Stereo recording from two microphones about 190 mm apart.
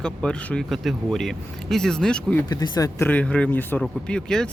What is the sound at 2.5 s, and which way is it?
Speech, 20° left (ahead or behind).